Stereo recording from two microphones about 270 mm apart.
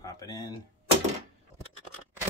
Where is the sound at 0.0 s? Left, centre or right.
Centre.